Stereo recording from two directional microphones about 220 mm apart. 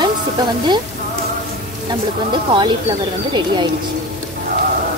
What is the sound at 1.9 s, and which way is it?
Speech, 20° right (ahead or behind).